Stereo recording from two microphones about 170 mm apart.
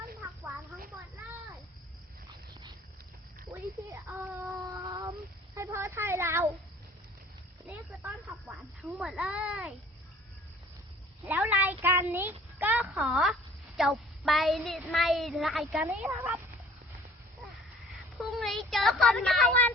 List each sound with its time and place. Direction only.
3.5 s a sound: 15° right (ahead or behind)
4.9 s child singing: 20° right (ahead or behind)
5.5 s a sound: 15° right (ahead or behind)
7.7 s speech: 10° right (ahead or behind)
11.3 s a child's voice: 10° right (ahead or behind)
18.2 s speech: centre (ahead or behind)